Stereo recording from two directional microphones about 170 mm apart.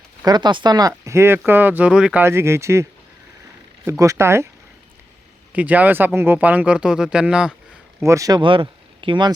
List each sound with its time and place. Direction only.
0.3 s speech: 25° right (ahead or behind)
3.8 s speech: 20° right (ahead or behind)
5.5 s speech: 10° right (ahead or behind)
8.0 s speech: 20° right (ahead or behind)